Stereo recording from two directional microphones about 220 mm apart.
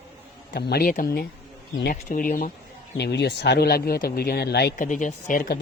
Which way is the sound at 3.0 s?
50° left (ahead or behind).